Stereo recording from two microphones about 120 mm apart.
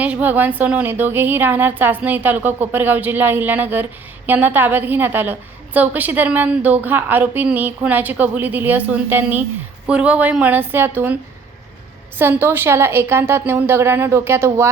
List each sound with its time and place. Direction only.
0.0 s a woman's voice: 15° right (ahead or behind)
12.2 s a woman's voice: 20° right (ahead or behind)